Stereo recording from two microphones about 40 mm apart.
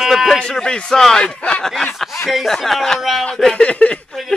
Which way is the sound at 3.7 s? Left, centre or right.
Left.